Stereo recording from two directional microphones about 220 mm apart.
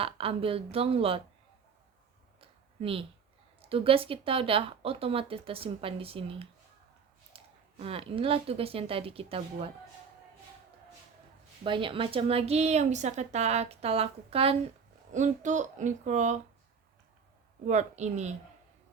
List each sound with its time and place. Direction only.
0.0 s a woman's voice: 25° right (ahead or behind)
2.4 s a sound: 25° right (ahead or behind)
3.6 s a woman's voice: 25° right (ahead or behind)
11.6 s a woman's voice: 20° right (ahead or behind)
17.7 s speech: 30° right (ahead or behind)